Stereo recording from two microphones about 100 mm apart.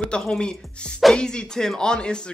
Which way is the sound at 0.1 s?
10° left (ahead or behind).